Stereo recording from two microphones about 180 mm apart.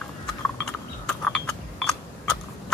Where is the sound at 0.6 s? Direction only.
5° left (ahead or behind).